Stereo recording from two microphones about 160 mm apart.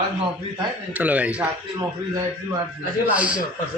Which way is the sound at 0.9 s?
10° right (ahead or behind).